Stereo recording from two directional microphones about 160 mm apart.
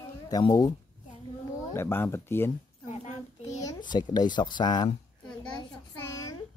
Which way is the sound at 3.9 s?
25° left (ahead or behind).